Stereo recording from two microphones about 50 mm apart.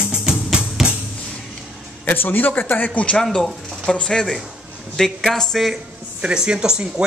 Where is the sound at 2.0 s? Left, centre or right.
Left.